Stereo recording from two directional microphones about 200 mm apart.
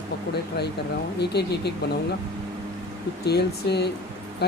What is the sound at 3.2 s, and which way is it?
Speech, 55° left (ahead or behind).